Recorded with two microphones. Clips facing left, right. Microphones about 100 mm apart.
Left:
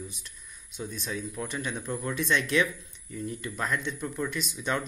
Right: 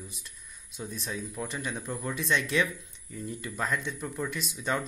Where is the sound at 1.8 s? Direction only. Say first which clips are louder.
Left 2 dB; 10° right (ahead or behind).